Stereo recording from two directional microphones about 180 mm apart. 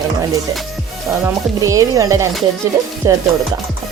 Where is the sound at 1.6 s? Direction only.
15° right (ahead or behind).